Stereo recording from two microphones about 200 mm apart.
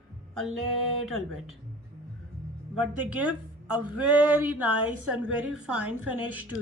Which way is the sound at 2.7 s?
5° right (ahead or behind).